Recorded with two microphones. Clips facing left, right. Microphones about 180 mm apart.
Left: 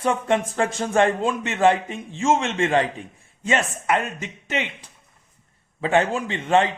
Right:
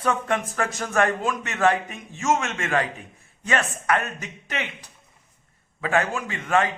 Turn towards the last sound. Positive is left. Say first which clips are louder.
# left 3 dB
turn(degrees=25)  # may be behind; listen again after turning